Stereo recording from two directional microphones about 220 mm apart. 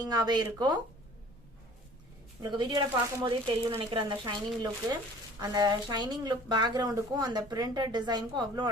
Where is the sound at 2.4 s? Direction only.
20° right (ahead or behind).